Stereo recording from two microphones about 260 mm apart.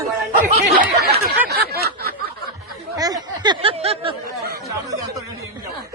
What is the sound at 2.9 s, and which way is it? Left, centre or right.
Speech, centre.